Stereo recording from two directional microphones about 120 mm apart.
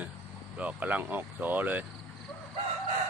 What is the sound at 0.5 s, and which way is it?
Speech, 10° right (ahead or behind).